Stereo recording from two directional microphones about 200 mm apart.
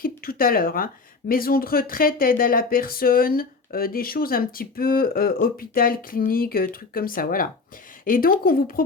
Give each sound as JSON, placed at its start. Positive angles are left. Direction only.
{"t": 0.0, "sound": "speech", "side_deg": 45}